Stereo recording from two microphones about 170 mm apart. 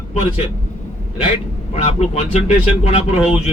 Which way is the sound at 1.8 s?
35° left (ahead or behind).